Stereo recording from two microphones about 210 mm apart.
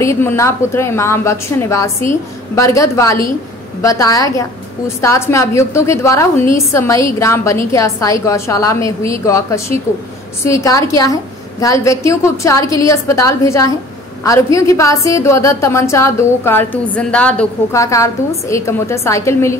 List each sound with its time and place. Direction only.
0.0 s a woman's voice: 15° left (ahead or behind)